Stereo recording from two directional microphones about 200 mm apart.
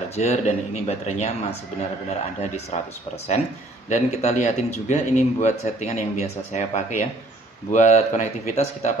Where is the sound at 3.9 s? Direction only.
35° left (ahead or behind).